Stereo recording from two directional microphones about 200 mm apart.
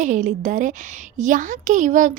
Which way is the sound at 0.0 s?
40° right (ahead or behind).